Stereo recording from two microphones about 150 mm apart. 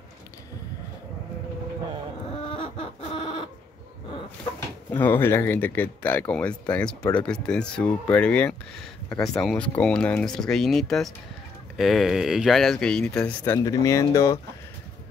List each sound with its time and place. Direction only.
2.5 s chicken: 40° left (ahead or behind)
4.9 s speech: 15° left (ahead or behind)
13.7 s speech: 20° left (ahead or behind)